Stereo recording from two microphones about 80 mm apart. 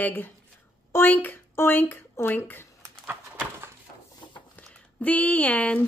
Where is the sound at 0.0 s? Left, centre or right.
Left.